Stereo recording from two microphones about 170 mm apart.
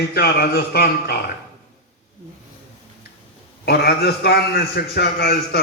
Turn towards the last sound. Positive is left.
turn(degrees=70)  # may be behind; listen again after turning